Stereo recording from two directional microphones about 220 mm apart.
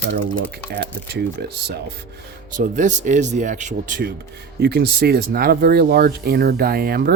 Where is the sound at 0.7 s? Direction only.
45° right (ahead or behind).